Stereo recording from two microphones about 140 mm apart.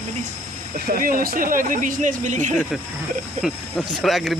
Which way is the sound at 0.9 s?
90° right.